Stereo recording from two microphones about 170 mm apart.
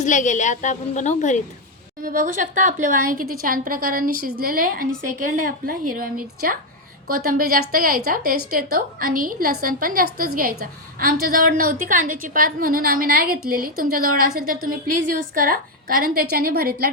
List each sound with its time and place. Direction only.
0.0 s a woman's voice: 45° left (ahead or behind)
2.0 s a woman's voice: 50° right (ahead or behind)
7.3 s a woman's voice: 55° right (ahead or behind)